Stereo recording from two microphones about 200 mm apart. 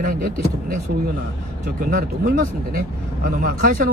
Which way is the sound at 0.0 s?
45° right (ahead or behind).